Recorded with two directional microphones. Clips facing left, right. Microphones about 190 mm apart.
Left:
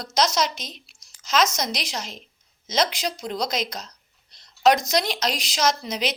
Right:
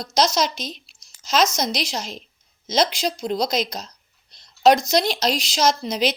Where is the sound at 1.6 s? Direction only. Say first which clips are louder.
Right 4 dB; 30° right (ahead or behind).